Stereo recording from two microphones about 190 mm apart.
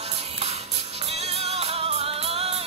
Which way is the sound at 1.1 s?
35° right (ahead or behind).